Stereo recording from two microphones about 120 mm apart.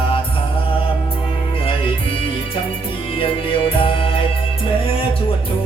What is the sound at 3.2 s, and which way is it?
Music, 45° left (ahead or behind).